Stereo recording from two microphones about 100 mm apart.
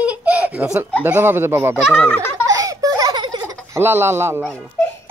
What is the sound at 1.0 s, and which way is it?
Speech, 20° right (ahead or behind).